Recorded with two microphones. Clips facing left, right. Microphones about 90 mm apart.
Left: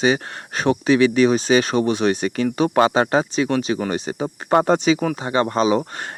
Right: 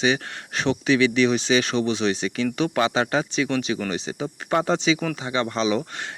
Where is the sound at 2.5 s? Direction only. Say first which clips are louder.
Left 7 dB; 35° left (ahead or behind).